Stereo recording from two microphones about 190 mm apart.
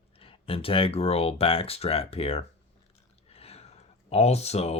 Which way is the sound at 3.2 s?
30° left (ahead or behind).